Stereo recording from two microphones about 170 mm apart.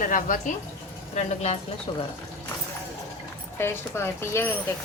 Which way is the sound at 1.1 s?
40° left (ahead or behind).